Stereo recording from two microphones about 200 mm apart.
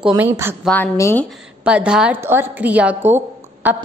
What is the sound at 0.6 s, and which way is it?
Speech, 10° left (ahead or behind).